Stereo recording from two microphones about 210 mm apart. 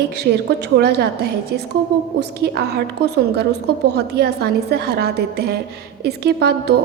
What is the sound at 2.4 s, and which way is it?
A woman's voice, 50° right (ahead or behind).